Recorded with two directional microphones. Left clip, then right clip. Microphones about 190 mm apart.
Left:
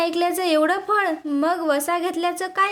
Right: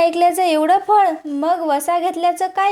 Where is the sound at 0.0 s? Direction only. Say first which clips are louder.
Right 7 dB; 10° right (ahead or behind).